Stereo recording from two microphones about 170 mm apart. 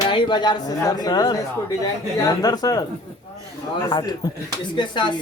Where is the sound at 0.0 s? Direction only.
25° left (ahead or behind).